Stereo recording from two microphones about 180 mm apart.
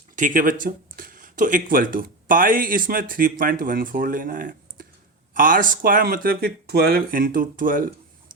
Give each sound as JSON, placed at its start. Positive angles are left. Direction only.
{"t": 0.2, "sound": "speech", "side_deg": -50}